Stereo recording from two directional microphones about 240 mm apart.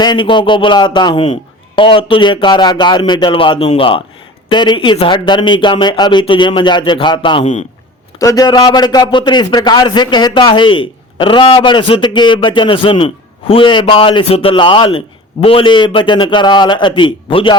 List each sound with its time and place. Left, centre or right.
0.0 s a man's voice: centre
8.2 s a man's voice: centre